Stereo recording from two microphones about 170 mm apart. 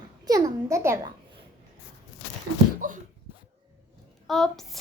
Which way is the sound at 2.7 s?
50° right (ahead or behind).